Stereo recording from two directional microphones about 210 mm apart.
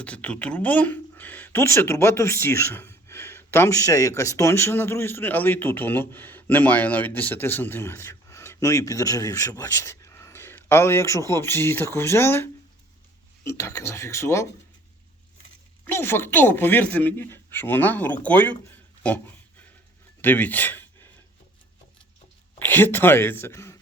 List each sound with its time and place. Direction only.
0.0 s speech: 5° left (ahead or behind)
15.8 s speech: 10° left (ahead or behind)
22.5 s speech: 10° left (ahead or behind)